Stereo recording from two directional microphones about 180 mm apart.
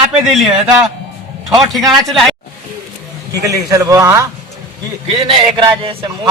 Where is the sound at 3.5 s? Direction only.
20° right (ahead or behind).